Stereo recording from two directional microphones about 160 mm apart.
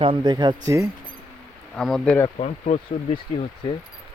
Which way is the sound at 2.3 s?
45° left (ahead or behind).